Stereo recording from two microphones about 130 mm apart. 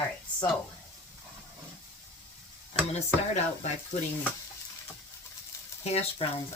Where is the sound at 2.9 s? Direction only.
60° left (ahead or behind).